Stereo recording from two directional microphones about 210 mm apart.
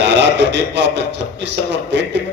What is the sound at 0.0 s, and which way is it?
A man's voice, 55° right (ahead or behind).